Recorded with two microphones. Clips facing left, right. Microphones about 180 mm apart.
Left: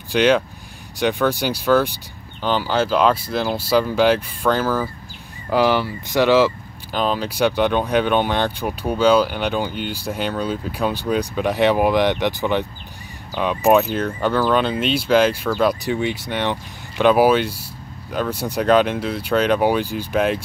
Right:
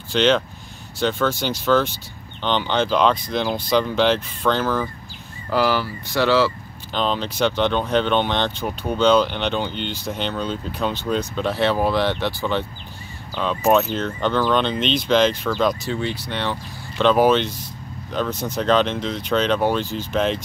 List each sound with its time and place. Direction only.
0.1 s speech: 10° left (ahead or behind)